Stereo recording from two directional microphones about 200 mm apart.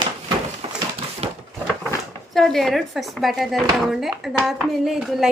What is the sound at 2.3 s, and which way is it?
Speech, centre (ahead or behind).